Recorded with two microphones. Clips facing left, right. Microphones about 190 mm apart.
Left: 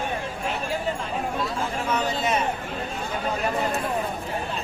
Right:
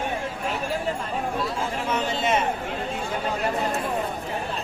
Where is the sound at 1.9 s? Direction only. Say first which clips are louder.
Right 1 dB; 25° right (ahead or behind).